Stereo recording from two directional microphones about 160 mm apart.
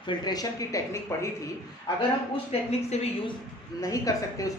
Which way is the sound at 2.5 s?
40° left (ahead or behind).